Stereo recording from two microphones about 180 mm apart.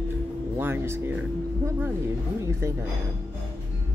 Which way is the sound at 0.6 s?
10° right (ahead or behind).